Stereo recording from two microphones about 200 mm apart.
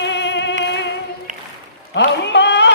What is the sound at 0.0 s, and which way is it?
Music, 60° left (ahead or behind).